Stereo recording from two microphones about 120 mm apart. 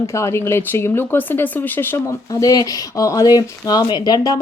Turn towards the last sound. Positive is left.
turn(degrees=35)  # may be behind; listen again after turning